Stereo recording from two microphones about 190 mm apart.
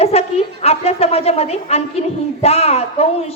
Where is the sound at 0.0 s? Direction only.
35° left (ahead or behind).